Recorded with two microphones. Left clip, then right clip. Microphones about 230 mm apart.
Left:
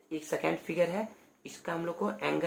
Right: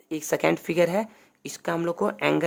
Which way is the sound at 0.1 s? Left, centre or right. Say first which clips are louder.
Right 8 dB; right.